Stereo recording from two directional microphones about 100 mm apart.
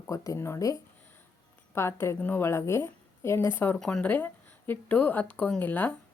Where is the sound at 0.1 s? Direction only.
30° left (ahead or behind).